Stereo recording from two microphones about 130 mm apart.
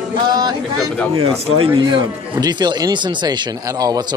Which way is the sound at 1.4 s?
45° right (ahead or behind).